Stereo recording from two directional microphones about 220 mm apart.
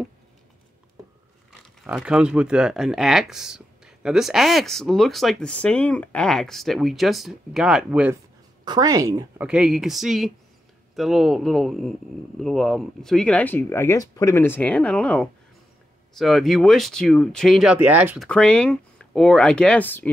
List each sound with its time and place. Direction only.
1.6 s speech: centre (ahead or behind)
8.6 s speech: 15° right (ahead or behind)
9.5 s speech: centre (ahead or behind)